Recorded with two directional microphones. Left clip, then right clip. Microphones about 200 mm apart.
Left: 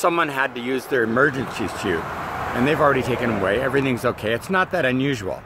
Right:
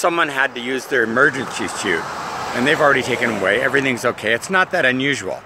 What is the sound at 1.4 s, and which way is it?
Speech, 25° left (ahead or behind).